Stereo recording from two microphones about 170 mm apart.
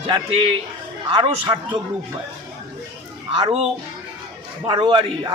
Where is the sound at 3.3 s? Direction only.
30° right (ahead or behind).